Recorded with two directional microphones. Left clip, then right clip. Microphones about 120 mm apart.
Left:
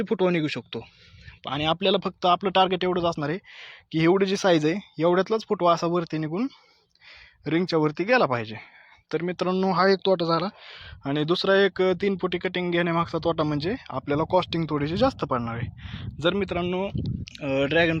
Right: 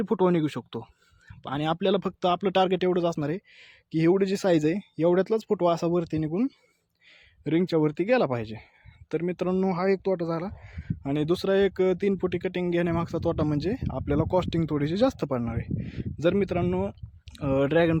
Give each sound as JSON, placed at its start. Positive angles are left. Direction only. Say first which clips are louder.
{"t": 0.0, "sound": "speech", "louder": "even", "side_deg": -35}
{"t": 3.2, "sound": "speech", "louder": "left 2 dB", "side_deg": -30}
{"t": 9.6, "sound": "speech", "louder": "left 7 dB", "side_deg": -10}